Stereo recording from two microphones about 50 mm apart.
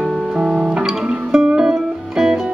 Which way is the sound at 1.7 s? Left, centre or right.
Centre.